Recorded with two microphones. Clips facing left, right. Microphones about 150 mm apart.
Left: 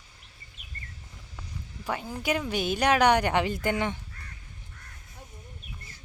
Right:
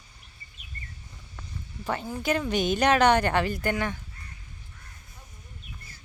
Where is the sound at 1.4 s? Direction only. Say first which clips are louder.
Right 1 dB; 10° left (ahead or behind).